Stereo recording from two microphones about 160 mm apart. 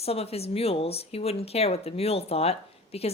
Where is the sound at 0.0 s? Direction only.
40° left (ahead or behind).